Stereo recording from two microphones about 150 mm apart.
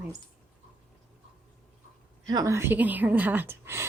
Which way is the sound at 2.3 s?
25° right (ahead or behind).